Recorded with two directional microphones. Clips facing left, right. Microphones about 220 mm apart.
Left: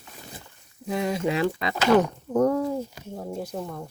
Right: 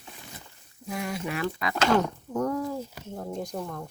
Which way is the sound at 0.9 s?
25° left (ahead or behind).